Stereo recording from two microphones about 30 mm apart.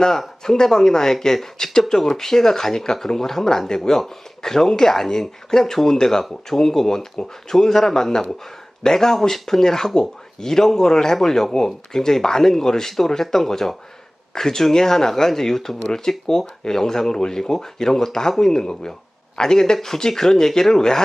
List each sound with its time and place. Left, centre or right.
0.4 s speech: left